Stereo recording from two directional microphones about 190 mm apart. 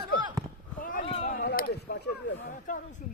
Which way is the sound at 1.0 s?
30° left (ahead or behind).